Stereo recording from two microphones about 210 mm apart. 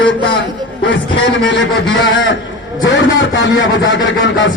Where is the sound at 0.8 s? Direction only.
60° left (ahead or behind).